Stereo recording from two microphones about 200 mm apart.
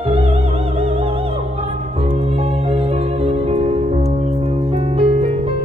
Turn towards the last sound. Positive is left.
turn(degrees=-30)  # may be behind; listen again after turning